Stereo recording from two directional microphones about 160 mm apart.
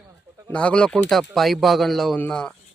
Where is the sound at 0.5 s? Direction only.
5° left (ahead or behind).